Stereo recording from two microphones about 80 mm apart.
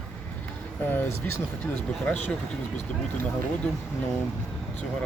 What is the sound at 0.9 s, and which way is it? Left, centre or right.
Speech, left.